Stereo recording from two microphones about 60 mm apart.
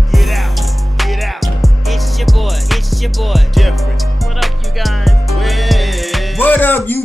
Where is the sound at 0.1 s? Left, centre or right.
Centre.